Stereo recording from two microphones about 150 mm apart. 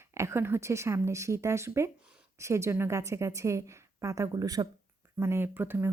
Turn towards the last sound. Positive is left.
turn(degrees=-15)  # may be behind; listen again after turning